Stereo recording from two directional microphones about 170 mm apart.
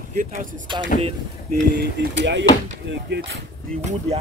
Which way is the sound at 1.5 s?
80° right.